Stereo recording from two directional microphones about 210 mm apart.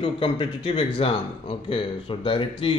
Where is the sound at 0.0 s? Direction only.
25° left (ahead or behind).